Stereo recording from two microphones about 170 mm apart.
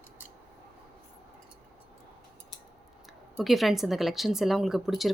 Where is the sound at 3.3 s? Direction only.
Centre (ahead or behind).